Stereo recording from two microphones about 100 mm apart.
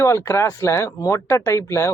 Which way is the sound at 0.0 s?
25° left (ahead or behind).